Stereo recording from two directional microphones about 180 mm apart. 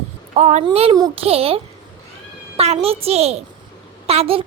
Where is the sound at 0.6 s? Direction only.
30° right (ahead or behind).